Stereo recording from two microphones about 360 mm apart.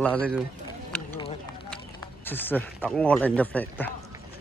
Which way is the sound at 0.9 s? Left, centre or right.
Centre.